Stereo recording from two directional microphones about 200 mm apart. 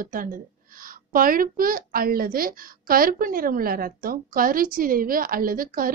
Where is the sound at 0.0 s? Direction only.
45° right (ahead or behind).